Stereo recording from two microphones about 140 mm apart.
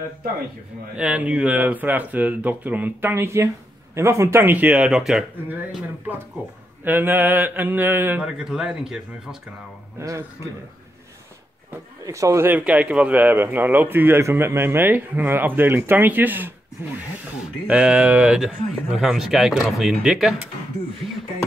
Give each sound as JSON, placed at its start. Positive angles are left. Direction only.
{"t": 0.9, "sound": "a man's voice", "side_deg": -10}
{"t": 6.8, "sound": "a man's voice", "side_deg": -15}
{"t": 9.9, "sound": "a man's voice", "side_deg": -20}
{"t": 12.0, "sound": "a man's voice", "side_deg": -20}